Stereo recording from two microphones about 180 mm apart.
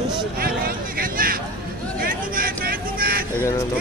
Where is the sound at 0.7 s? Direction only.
55° right (ahead or behind).